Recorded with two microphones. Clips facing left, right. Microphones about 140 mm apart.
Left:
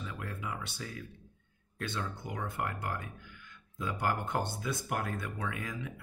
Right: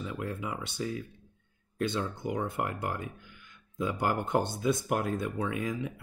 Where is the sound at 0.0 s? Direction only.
20° right (ahead or behind).